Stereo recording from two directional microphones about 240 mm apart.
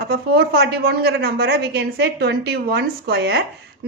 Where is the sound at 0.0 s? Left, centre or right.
Right.